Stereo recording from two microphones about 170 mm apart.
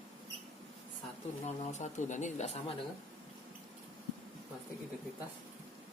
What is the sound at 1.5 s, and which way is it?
Speech, 40° left (ahead or behind).